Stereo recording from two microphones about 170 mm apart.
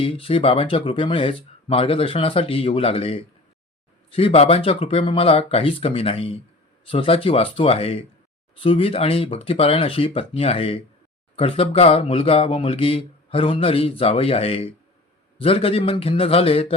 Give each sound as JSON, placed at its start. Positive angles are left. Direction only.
{"t": 0.0, "sound": "speech", "side_deg": 30}